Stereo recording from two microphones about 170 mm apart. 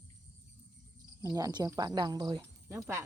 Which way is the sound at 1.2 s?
20° right (ahead or behind).